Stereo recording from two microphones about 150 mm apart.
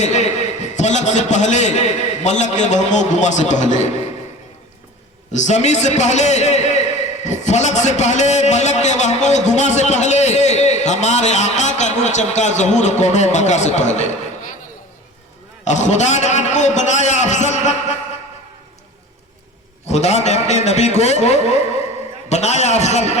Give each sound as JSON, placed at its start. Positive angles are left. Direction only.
{"t": 0.0, "sound": "a man's voice", "side_deg": 50}
{"t": 5.3, "sound": "a man's voice", "side_deg": 50}
{"t": 15.6, "sound": "a man's voice", "side_deg": 50}
{"t": 19.8, "sound": "a man's voice", "side_deg": 45}